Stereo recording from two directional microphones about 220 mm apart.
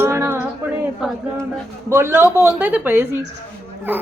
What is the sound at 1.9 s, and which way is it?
A woman's voice, 10° right (ahead or behind).